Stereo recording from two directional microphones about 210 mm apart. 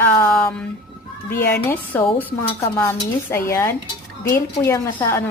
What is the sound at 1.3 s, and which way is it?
Speech, 45° left (ahead or behind).